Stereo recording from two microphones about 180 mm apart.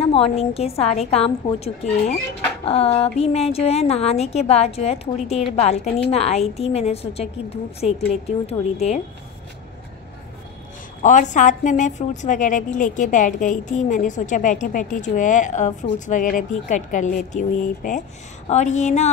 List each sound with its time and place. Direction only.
0.0 s a woman's voice: 30° left (ahead or behind)
11.0 s a woman's voice: 45° left (ahead or behind)